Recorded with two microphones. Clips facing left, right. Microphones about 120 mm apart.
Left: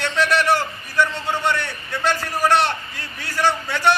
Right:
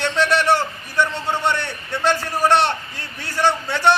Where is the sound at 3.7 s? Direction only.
25° right (ahead or behind).